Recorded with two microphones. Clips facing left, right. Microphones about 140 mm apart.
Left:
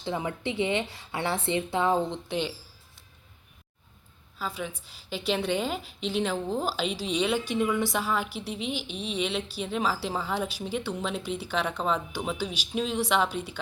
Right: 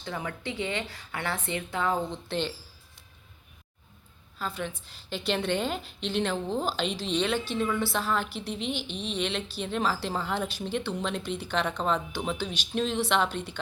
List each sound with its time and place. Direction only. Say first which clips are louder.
0.0 s a woman's voice: left 4 dB; 20° left (ahead or behind)
4.4 s a woman's voice: even; 5° left (ahead or behind)